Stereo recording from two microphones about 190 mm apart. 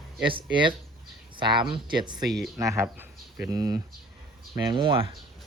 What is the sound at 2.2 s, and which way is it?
Speech, centre (ahead or behind).